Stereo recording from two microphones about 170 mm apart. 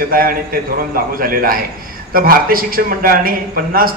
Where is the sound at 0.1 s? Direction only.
60° right (ahead or behind).